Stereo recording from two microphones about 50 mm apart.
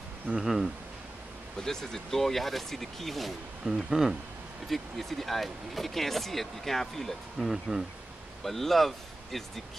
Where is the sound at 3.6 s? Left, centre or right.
Centre.